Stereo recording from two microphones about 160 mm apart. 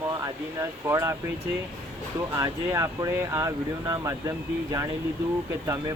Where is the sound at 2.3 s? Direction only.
20° right (ahead or behind).